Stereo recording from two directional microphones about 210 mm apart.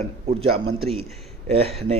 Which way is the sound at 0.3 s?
25° right (ahead or behind).